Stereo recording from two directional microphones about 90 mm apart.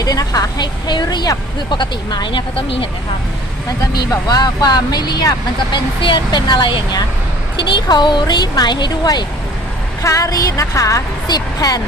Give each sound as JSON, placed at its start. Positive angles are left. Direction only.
{"t": 0.0, "sound": "a woman's voice", "side_deg": 45}
{"t": 4.1, "sound": "speech", "side_deg": 45}
{"t": 5.7, "sound": "a woman's voice", "side_deg": 60}
{"t": 10.0, "sound": "a woman's voice", "side_deg": 40}
{"t": 11.3, "sound": "speech", "side_deg": 45}